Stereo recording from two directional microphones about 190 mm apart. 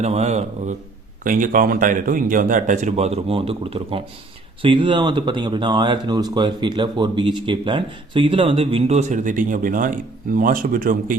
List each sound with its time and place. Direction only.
0.0 s a man's voice: 35° right (ahead or behind)
1.2 s speech: 45° right (ahead or behind)